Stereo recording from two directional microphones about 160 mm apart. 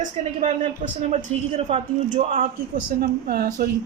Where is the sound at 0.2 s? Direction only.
40° right (ahead or behind).